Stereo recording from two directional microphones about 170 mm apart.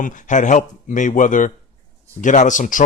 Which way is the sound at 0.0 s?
50° left (ahead or behind).